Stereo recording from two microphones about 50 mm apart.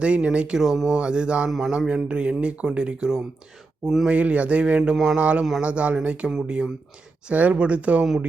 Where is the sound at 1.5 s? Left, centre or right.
Centre.